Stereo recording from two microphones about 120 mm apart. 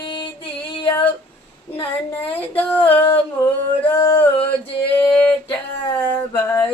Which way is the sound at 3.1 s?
20° left (ahead or behind).